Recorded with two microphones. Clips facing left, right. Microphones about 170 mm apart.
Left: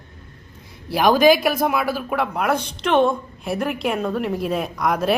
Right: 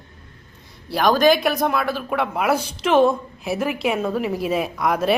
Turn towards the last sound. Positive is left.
turn(degrees=0)  # may be behind; listen again after turning